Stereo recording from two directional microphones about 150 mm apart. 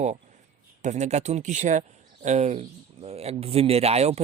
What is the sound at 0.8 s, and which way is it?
Speech, 50° right (ahead or behind).